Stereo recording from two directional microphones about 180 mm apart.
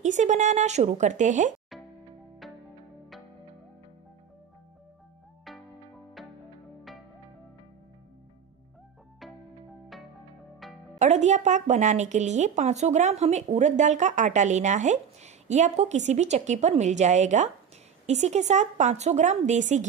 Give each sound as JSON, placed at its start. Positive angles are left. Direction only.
{"t": 0.0, "sound": "a woman's voice", "side_deg": -40}
{"t": 2.4, "sound": "music", "side_deg": 0}
{"t": 10.6, "sound": "music", "side_deg": 0}
{"t": 11.0, "sound": "a woman's voice", "side_deg": -40}